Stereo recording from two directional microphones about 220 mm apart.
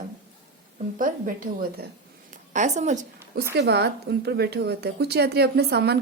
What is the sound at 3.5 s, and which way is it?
A woman's voice, 50° right (ahead or behind).